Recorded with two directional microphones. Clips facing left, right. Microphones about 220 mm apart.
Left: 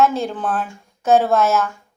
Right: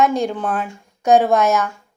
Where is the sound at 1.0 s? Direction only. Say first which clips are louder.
Right 1 dB; 15° right (ahead or behind).